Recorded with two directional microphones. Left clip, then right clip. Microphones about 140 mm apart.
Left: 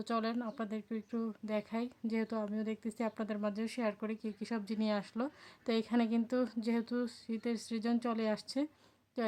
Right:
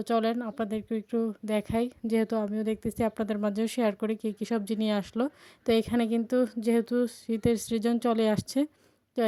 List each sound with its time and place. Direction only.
0.1 s a woman's voice: 30° right (ahead or behind)